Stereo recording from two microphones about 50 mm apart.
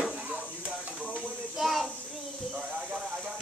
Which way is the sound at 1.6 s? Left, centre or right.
Centre.